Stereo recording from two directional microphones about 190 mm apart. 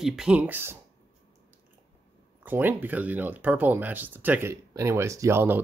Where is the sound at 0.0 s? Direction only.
Centre (ahead or behind).